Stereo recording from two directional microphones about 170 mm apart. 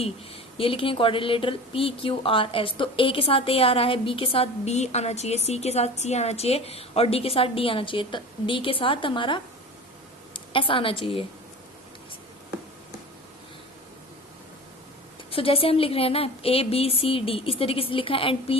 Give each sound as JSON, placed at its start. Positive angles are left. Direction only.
{"t": 0.5, "sound": "a woman's voice", "side_deg": 30}
{"t": 15.3, "sound": "speech", "side_deg": 35}